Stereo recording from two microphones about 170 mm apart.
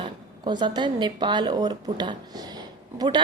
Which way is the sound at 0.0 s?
25° right (ahead or behind).